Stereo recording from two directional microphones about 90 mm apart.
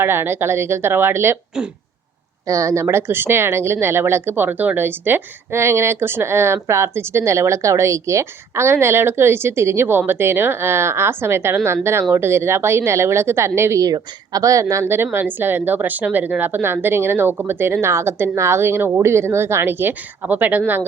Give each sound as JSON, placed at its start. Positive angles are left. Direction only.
{"t": 0.0, "sound": "speech", "side_deg": -25}
{"t": 2.5, "sound": "speech", "side_deg": -35}
{"t": 13.8, "sound": "speech", "side_deg": -45}